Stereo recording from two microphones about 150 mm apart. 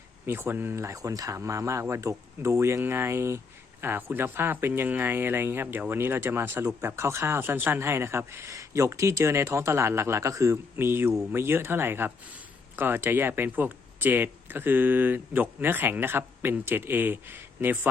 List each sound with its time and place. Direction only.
0.3 s speech: 15° right (ahead or behind)